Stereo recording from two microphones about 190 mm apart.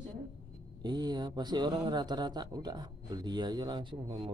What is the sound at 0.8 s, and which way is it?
Speech, 20° right (ahead or behind).